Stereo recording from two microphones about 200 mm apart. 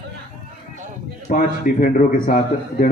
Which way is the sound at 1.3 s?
45° left (ahead or behind).